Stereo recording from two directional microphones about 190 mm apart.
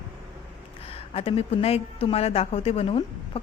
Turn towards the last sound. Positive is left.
turn(degrees=30)  # may be behind; listen again after turning